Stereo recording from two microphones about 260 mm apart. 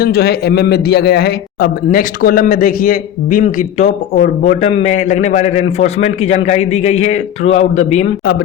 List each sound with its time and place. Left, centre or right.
0.0 s a man's voice: left